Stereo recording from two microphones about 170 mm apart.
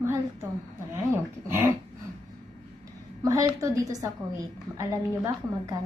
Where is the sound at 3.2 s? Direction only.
20° right (ahead or behind).